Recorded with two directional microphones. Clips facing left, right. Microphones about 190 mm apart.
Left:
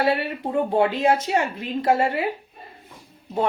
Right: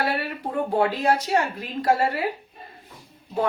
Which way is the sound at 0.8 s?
25° left (ahead or behind).